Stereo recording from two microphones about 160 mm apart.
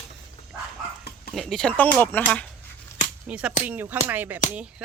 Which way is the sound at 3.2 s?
5° right (ahead or behind).